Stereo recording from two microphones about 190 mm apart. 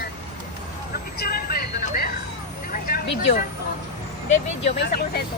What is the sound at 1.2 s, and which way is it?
Vehicle, 50° left (ahead or behind).